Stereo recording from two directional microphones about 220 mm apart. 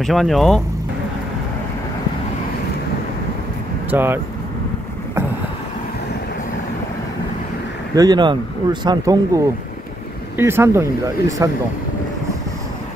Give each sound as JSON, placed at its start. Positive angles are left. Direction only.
{"t": 0.0, "sound": "speech", "side_deg": 0}
{"t": 3.9, "sound": "speech", "side_deg": -10}
{"t": 7.9, "sound": "speech", "side_deg": -15}